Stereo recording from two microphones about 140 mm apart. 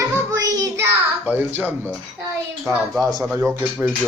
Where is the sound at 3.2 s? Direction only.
5° right (ahead or behind).